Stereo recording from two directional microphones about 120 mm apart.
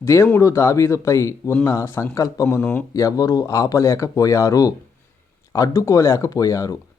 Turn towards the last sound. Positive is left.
turn(degrees=30)  # may be behind; listen again after turning